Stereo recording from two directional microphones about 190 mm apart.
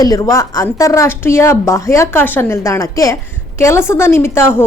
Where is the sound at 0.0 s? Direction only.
20° left (ahead or behind).